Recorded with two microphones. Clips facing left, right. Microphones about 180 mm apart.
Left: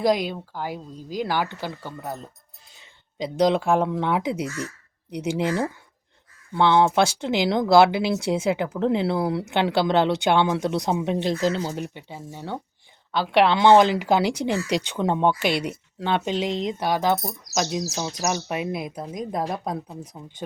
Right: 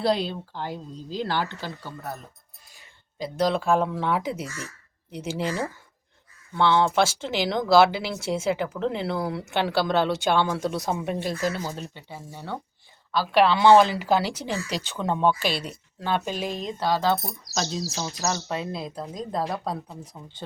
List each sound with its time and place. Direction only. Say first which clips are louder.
0.0 s speech: left 2 dB; 10° left (ahead or behind)
3.3 s speech: left 3 dB; 15° left (ahead or behind)